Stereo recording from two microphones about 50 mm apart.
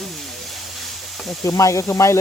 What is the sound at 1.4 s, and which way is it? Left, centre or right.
Speech, left.